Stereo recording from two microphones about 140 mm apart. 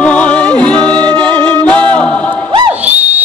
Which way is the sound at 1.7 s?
10° left (ahead or behind).